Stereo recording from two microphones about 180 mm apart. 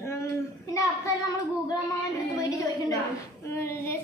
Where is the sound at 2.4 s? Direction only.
20° left (ahead or behind).